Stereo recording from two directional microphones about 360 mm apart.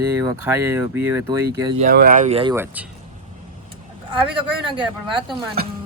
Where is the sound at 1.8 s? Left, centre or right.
Right; by 2.9 s centre.